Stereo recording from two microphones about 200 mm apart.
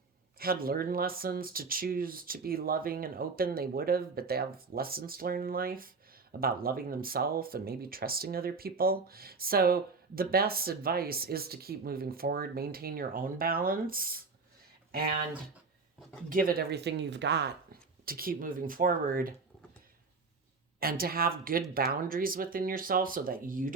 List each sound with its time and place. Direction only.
0.3 s speech: 50° right (ahead or behind)
16.3 s speech: 45° right (ahead or behind)
20.7 s speech: 50° right (ahead or behind)